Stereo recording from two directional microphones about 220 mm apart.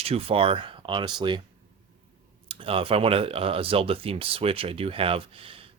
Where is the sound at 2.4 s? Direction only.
25° right (ahead or behind).